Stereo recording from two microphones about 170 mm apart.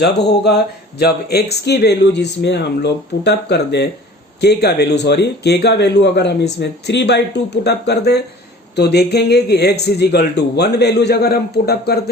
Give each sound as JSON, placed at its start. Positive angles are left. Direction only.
{"t": 0.0, "sound": "speech", "side_deg": 80}